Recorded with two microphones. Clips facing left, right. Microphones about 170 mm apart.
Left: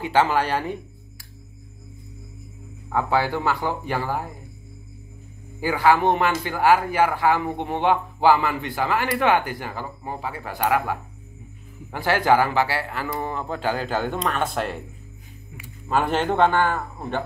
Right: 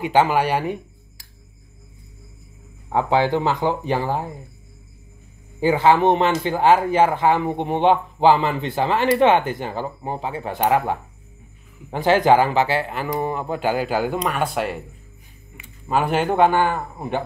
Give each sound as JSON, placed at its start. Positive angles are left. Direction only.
{"t": 0.0, "sound": "speech", "side_deg": -15}
{"t": 2.9, "sound": "speech", "side_deg": -20}
{"t": 5.6, "sound": "speech", "side_deg": -25}
{"t": 15.9, "sound": "speech", "side_deg": -10}